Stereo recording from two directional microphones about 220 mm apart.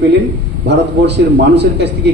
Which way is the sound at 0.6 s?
50° right (ahead or behind).